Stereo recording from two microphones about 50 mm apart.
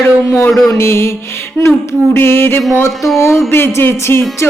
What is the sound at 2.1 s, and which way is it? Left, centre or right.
Speech, left.